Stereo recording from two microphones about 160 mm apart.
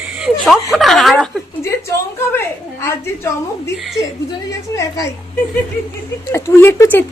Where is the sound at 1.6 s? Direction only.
15° left (ahead or behind).